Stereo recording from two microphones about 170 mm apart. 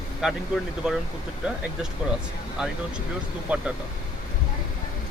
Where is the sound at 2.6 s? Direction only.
5° right (ahead or behind).